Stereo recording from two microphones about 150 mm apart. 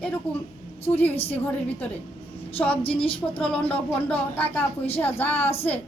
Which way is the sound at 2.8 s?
35° left (ahead or behind).